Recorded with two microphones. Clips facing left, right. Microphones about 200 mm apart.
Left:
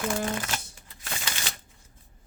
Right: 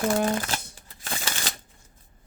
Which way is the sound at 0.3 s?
35° right (ahead or behind).